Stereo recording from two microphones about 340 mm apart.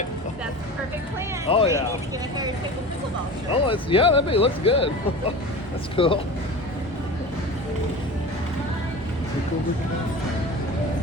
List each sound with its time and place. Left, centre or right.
1.5 s speech: centre
3.5 s speech: centre
6.0 s speech: centre